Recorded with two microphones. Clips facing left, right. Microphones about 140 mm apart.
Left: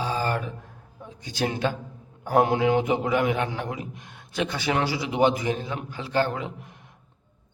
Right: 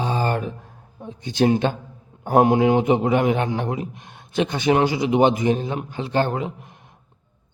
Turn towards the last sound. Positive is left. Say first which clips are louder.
# right 3 dB
turn(degrees=-20)  # may be behind; listen again after turning